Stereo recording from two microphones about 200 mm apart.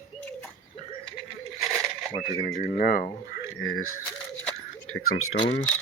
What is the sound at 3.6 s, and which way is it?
Speech, 85° left.